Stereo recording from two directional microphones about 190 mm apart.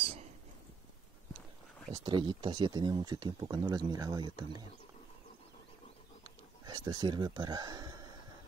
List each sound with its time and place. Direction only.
2.0 s speech: 25° right (ahead or behind)
6.6 s speech: 20° right (ahead or behind)